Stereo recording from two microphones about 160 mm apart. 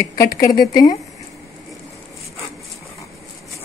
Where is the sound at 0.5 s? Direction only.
60° left (ahead or behind).